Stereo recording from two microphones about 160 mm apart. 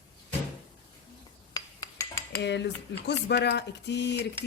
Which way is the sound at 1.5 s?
25° left (ahead or behind).